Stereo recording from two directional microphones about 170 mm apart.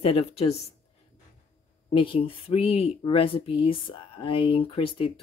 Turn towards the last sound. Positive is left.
turn(degrees=30)  # may be behind; listen again after turning